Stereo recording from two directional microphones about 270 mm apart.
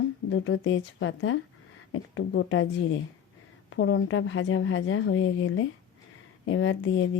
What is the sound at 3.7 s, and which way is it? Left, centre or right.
Speech, left.